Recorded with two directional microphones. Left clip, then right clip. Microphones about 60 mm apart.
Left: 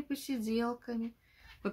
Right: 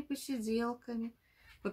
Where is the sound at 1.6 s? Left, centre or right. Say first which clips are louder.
Left 2 dB; left.